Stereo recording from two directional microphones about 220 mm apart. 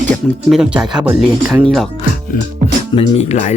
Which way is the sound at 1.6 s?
Centre (ahead or behind).